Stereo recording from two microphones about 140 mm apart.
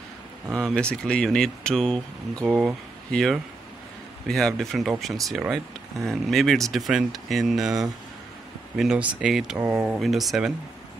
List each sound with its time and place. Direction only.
0.7 s speech: 5° left (ahead or behind)
2.4 s speech: 5° right (ahead or behind)
9.9 s speech: centre (ahead or behind)